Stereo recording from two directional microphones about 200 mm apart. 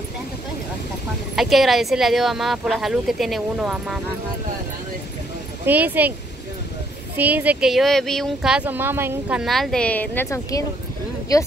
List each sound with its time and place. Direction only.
1.3 s speech: centre (ahead or behind)
5.7 s speech: 10° right (ahead or behind)
7.2 s speech: 10° right (ahead or behind); by 11.4 s 15° left (ahead or behind)